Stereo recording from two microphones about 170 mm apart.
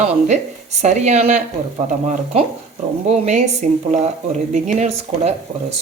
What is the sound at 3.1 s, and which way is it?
Speech, 45° right (ahead or behind).